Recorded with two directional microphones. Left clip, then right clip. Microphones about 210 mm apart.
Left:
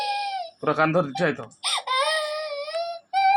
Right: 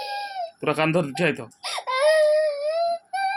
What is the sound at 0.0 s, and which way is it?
Chicken, 15° right (ahead or behind).